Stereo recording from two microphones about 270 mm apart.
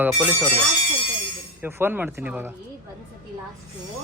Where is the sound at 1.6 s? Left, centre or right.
Centre.